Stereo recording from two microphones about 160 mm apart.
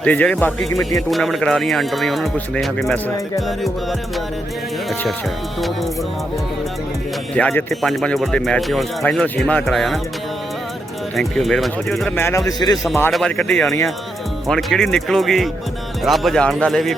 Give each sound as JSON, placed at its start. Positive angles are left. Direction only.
{"t": 0.0, "sound": "speech", "side_deg": 10}
{"t": 7.3, "sound": "speech", "side_deg": 5}
{"t": 11.2, "sound": "speech", "side_deg": 0}
{"t": 12.1, "sound": "speech", "side_deg": 15}
{"t": 13.1, "sound": "speech", "side_deg": 5}